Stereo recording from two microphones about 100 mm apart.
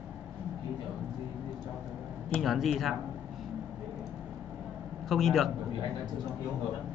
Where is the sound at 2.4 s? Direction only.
Centre (ahead or behind).